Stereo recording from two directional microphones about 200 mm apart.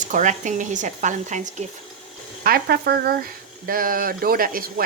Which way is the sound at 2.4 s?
50° right (ahead or behind).